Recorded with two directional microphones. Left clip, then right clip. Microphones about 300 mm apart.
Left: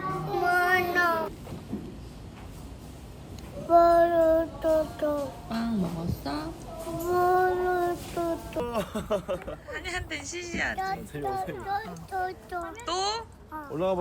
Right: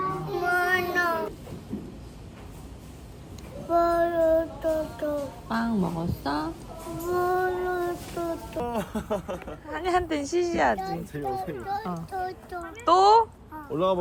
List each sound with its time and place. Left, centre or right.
0.1 s child singing: centre
3.7 s child singing: centre
13.7 s speech: centre